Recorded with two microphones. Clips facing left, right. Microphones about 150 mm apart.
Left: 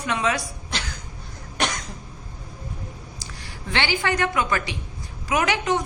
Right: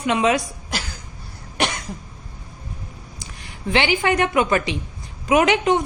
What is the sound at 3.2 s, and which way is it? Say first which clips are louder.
A woman's voice: right 4 dB; 20° right (ahead or behind).